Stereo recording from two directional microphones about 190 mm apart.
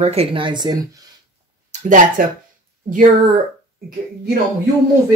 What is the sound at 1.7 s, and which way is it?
Speech, 40° right (ahead or behind).